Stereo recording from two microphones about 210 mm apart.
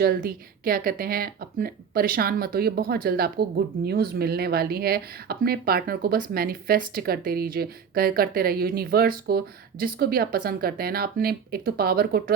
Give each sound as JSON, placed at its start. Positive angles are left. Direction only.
{"t": 0.0, "sound": "speech", "side_deg": -45}